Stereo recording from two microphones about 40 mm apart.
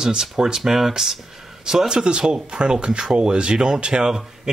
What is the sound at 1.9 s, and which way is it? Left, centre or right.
Speech, right.